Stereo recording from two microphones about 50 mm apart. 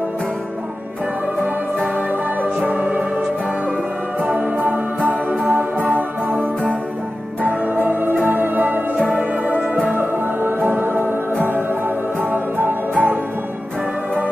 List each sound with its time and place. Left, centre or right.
2.4 s music: right
4.2 s music: right
8.9 s music: right